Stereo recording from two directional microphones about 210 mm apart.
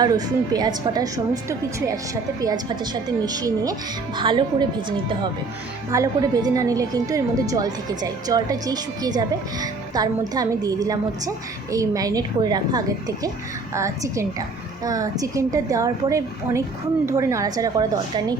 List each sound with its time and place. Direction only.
0.0 s a woman's voice: 15° right (ahead or behind)
5.9 s a woman's voice: 15° right (ahead or behind)